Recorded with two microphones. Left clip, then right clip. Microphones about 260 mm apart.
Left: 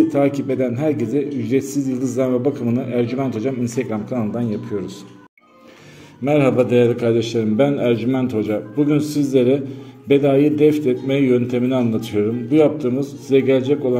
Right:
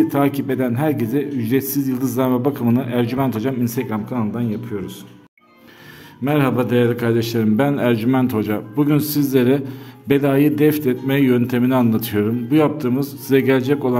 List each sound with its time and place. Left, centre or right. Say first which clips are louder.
0.1 s a man's voice: left 1 dB; centre
6.2 s a man's voice: left 3 dB; centre